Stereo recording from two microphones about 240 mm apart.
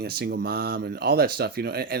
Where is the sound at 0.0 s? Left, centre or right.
Right.